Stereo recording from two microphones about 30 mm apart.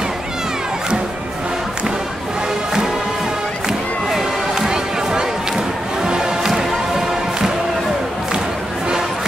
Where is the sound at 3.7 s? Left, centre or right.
Right.